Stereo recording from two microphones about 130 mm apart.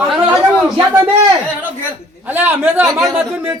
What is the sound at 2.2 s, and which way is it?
Speech, 15° right (ahead or behind).